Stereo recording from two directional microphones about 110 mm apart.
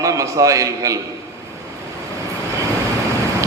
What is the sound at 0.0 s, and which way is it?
Speech, 30° right (ahead or behind).